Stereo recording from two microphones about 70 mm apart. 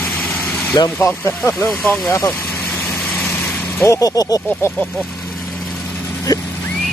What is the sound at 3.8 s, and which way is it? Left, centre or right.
Speech, left.